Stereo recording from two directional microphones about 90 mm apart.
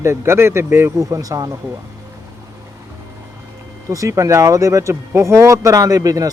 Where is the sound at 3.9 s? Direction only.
35° right (ahead or behind).